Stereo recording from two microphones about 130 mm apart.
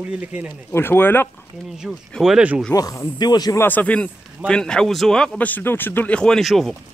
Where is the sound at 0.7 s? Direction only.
15° left (ahead or behind).